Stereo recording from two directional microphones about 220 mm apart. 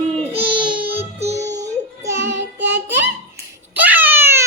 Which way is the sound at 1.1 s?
30° right (ahead or behind).